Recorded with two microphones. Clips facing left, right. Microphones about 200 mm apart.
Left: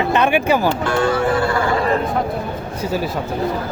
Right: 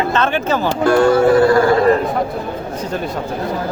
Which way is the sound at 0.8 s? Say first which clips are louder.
Right 6 dB; 40° right (ahead or behind).